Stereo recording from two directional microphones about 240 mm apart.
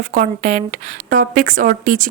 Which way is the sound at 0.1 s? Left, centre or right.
Right.